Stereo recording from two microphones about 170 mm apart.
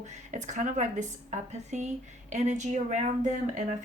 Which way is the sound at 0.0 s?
45° right (ahead or behind).